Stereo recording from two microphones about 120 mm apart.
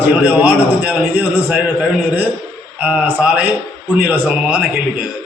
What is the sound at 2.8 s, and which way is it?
A man's voice, 10° right (ahead or behind).